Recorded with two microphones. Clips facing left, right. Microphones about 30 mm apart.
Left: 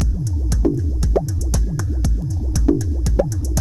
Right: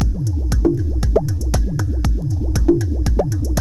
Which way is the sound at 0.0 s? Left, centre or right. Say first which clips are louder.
Right 2 dB; centre.